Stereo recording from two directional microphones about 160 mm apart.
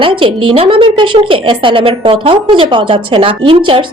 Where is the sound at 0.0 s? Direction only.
35° right (ahead or behind).